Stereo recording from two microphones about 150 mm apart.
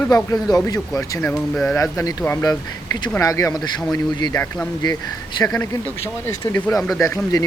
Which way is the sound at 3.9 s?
30° left (ahead or behind).